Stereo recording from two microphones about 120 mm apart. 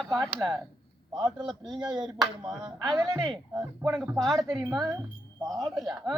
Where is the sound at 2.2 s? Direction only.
35° right (ahead or behind).